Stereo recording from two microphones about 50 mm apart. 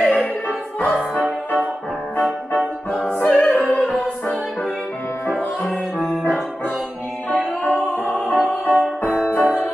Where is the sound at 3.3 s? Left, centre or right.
Left.